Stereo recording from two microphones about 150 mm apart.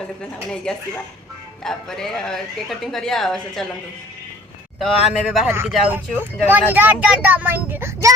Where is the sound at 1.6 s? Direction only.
5° left (ahead or behind).